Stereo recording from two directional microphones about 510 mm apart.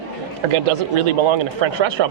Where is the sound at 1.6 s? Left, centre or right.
Right.